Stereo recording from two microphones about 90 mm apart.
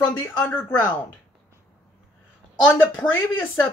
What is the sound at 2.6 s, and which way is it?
Speech, 15° left (ahead or behind).